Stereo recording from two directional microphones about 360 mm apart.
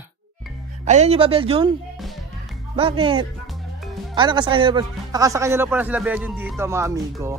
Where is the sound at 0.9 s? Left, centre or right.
Centre.